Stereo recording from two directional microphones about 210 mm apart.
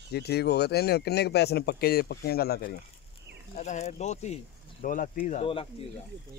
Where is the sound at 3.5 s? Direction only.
35° left (ahead or behind).